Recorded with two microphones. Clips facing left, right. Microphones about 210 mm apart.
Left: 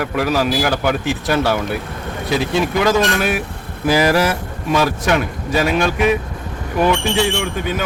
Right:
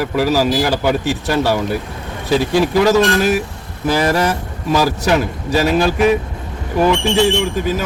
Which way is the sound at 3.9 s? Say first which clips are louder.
Left 1 dB; 10° left (ahead or behind).